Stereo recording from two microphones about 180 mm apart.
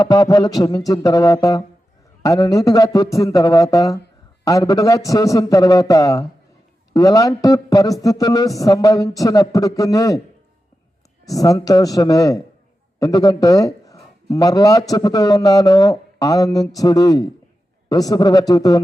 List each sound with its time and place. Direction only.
0.0 s a man's voice: 20° left (ahead or behind)
11.3 s a man's voice: 20° left (ahead or behind)